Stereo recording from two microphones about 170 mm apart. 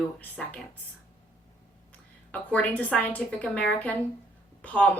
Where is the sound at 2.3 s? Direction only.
10° left (ahead or behind).